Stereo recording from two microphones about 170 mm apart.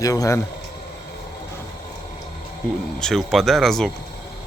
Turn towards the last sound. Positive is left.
turn(degrees=0)  # may be behind; listen again after turning